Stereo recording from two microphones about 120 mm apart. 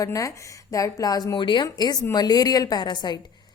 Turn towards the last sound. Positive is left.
turn(degrees=35)  # may be behind; listen again after turning